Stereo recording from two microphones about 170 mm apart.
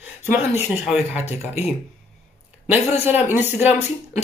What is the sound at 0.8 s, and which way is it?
Speech, 5° right (ahead or behind).